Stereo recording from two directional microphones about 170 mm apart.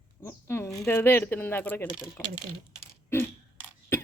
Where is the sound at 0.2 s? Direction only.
15° left (ahead or behind).